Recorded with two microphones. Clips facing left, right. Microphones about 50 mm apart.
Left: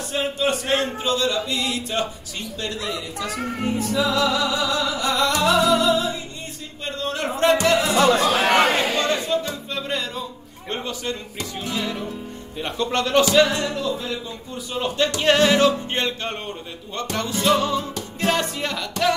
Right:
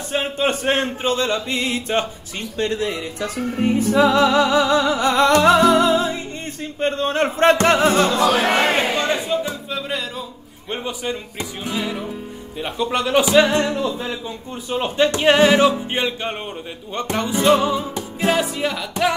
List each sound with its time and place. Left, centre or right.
0.1 s speech: right
8.7 s chatter: right
9.8 s music: centre
10.7 s speech: centre
13.5 s music: right
14.7 s speech: right